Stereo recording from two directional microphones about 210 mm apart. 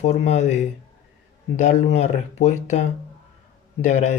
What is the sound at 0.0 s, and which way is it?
Speech, 35° left (ahead or behind).